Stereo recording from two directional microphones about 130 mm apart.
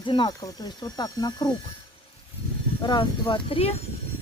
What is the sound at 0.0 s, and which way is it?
Speech, 35° left (ahead or behind).